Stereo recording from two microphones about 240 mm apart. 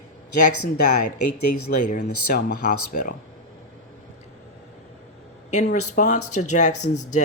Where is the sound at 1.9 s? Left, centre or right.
Left.